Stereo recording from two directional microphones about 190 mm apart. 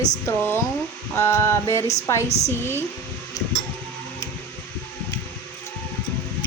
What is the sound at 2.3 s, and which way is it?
Speech, 35° left (ahead or behind).